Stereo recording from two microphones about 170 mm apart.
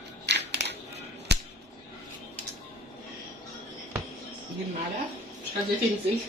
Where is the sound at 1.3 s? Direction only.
75° right (ahead or behind).